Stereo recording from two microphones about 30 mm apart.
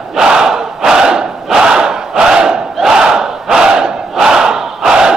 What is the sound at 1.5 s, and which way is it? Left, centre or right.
Battle cry, right.